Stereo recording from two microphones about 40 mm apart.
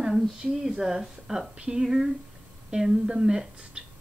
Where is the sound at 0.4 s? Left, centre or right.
Centre.